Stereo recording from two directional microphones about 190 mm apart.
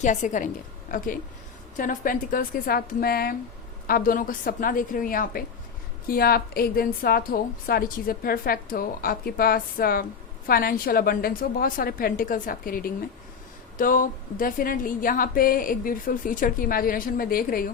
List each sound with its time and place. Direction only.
0.0 s a woman's voice: 40° left (ahead or behind)